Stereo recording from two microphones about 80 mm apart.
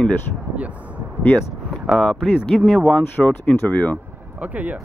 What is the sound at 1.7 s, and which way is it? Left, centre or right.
Speech, centre.